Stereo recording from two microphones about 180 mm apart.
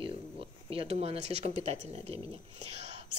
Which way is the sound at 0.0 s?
30° right (ahead or behind).